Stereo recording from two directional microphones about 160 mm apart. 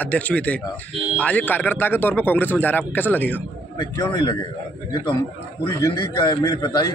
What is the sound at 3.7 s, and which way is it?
Speech, 25° left (ahead or behind).